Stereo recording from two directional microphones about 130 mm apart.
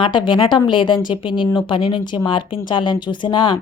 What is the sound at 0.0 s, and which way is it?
Speech, 35° left (ahead or behind).